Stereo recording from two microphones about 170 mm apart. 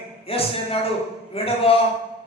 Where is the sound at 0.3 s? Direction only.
35° left (ahead or behind).